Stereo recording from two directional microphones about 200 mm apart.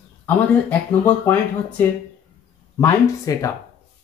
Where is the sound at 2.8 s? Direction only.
15° left (ahead or behind).